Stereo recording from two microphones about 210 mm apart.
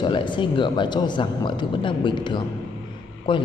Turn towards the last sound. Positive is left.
turn(degrees=25)  # may be behind; listen again after turning